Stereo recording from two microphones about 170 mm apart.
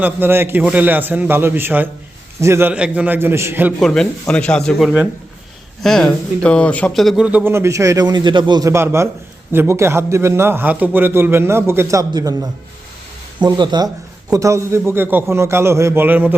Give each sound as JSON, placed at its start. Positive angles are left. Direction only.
{"t": 0.0, "sound": "speech", "side_deg": -10}
{"t": 3.8, "sound": "speech", "side_deg": 5}